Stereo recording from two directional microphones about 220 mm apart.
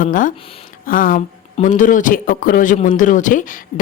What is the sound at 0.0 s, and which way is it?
Speech, 35° left (ahead or behind).